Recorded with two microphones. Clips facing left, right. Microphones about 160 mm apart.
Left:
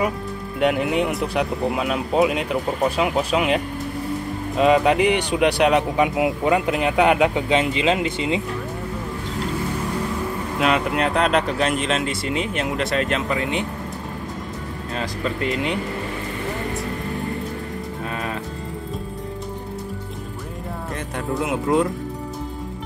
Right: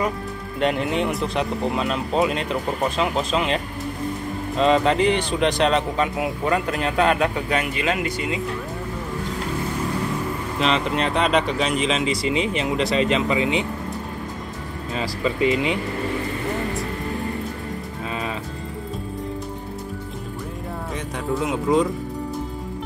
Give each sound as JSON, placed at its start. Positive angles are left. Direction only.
{"t": 0.6, "sound": "speech", "side_deg": 5}
{"t": 10.6, "sound": "speech", "side_deg": 5}
{"t": 15.0, "sound": "speech", "side_deg": 0}
{"t": 21.4, "sound": "speech", "side_deg": 0}